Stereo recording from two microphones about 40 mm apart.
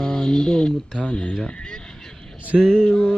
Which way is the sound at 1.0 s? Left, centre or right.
Left.